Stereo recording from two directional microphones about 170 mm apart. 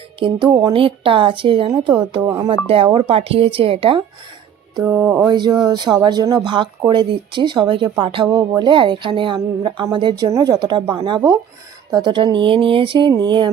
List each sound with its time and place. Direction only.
0.2 s a woman's voice: 30° right (ahead or behind)
4.8 s music: 15° right (ahead or behind)
5.3 s speech: 25° right (ahead or behind)